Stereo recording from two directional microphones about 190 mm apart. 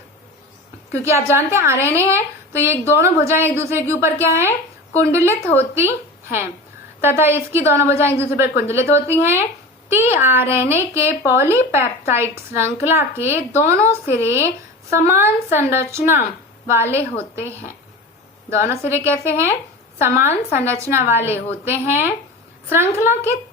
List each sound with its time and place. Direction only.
0.9 s a woman's voice: 15° right (ahead or behind)
7.0 s a woman's voice: 10° right (ahead or behind)
18.5 s a woman's voice: 15° right (ahead or behind)